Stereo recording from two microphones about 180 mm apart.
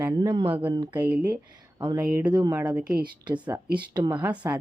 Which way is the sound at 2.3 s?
20° right (ahead or behind).